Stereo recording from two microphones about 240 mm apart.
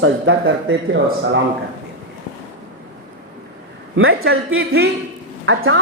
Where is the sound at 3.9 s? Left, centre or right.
Right.